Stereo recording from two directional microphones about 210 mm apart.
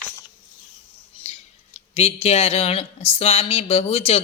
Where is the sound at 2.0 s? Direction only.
30° left (ahead or behind).